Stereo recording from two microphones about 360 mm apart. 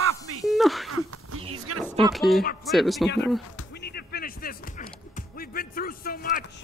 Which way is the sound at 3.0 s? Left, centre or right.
Left.